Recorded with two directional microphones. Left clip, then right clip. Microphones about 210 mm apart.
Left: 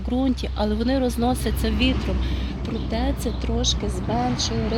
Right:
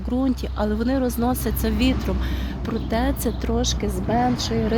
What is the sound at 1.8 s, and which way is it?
Speech, 25° right (ahead or behind).